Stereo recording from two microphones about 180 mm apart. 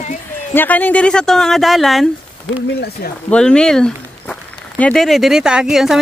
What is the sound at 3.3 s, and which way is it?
Speech, 5° left (ahead or behind).